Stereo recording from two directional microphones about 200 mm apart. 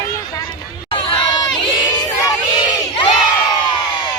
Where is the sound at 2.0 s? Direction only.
20° left (ahead or behind).